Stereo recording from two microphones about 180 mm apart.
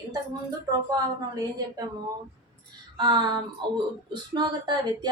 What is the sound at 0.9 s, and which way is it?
Speech, 20° right (ahead or behind).